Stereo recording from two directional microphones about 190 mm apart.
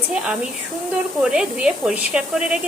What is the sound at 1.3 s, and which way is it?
Speech, 5° right (ahead or behind).